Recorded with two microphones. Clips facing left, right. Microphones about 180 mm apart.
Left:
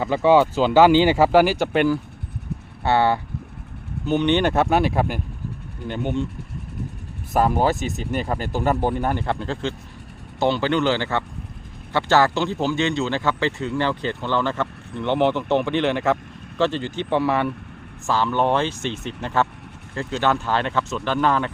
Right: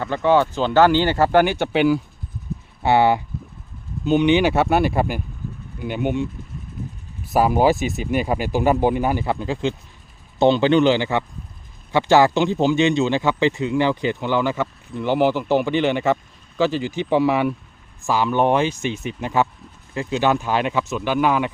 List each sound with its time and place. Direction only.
0.0 s speech: 10° left (ahead or behind)
2.8 s speech: 15° right (ahead or behind)
7.3 s speech: 5° right (ahead or behind)